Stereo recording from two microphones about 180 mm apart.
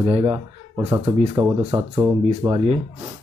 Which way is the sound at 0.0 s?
30° right (ahead or behind).